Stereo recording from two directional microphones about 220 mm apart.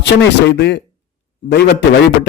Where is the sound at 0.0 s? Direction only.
50° left (ahead or behind).